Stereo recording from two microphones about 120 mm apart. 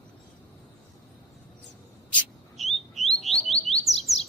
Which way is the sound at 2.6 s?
Centre (ahead or behind).